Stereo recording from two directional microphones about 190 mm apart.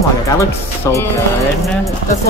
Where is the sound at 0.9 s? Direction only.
15° left (ahead or behind).